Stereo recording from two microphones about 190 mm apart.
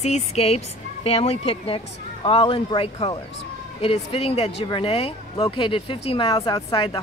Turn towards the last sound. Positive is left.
turn(degrees=25)  # may be behind; listen again after turning